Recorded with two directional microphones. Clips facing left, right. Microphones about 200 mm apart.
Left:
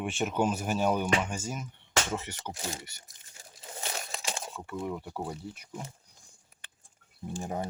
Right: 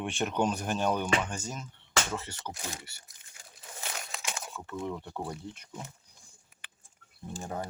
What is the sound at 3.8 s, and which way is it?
Crumpling, 35° left (ahead or behind).